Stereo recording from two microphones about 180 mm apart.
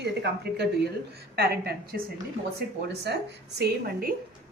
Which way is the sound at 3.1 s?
70° right (ahead or behind).